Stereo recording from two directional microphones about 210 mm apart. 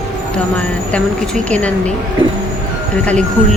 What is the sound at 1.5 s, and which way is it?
Speech, 5° left (ahead or behind).